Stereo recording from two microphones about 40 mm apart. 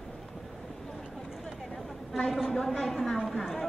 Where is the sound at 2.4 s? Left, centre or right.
Centre.